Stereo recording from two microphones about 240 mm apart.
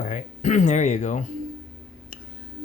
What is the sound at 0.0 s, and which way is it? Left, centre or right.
Speech, left.